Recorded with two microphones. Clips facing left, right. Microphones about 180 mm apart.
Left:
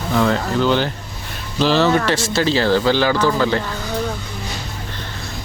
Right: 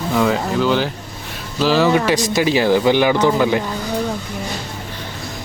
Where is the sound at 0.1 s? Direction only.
5° right (ahead or behind).